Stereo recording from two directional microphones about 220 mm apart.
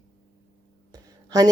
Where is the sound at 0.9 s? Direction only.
15° right (ahead or behind).